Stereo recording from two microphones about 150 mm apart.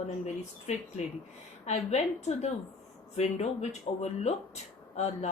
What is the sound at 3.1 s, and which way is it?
Speech, 45° left (ahead or behind).